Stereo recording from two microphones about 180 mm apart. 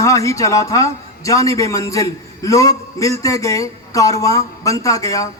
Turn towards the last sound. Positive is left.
turn(degrees=20)  # may be behind; listen again after turning